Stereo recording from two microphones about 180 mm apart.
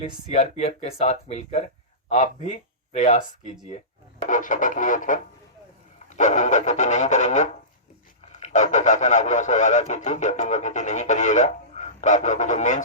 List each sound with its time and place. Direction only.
0.0 s speech: 35° left (ahead or behind)